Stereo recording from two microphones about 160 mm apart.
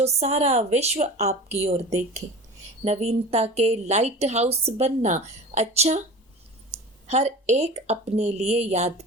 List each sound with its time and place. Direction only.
0.0 s speech: 40° right (ahead or behind)
2.8 s speech: 40° right (ahead or behind)